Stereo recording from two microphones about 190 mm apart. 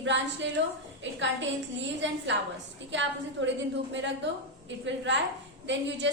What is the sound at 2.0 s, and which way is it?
A woman's voice, 75° right (ahead or behind).